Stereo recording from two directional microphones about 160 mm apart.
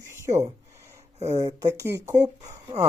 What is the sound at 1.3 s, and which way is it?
Speech, 20° right (ahead or behind).